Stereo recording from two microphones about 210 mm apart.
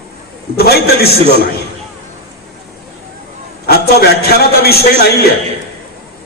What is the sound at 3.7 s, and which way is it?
A man's voice, 50° left (ahead or behind).